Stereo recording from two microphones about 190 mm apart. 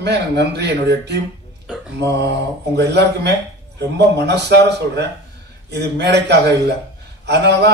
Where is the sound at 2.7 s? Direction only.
60° right (ahead or behind).